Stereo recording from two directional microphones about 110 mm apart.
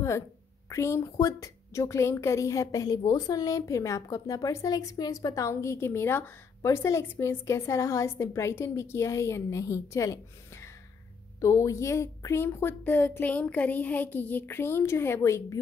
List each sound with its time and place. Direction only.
0.7 s a woman's voice: 25° left (ahead or behind)